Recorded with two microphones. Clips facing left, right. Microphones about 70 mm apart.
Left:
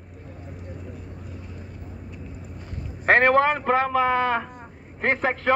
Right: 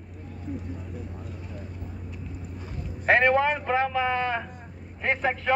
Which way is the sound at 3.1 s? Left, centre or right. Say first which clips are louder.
Left 3 dB; left.